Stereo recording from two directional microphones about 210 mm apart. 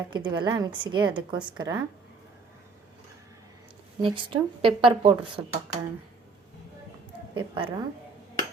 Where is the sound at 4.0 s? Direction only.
25° right (ahead or behind).